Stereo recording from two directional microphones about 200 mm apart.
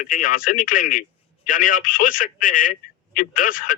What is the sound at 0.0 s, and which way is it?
A man's voice, 45° left (ahead or behind).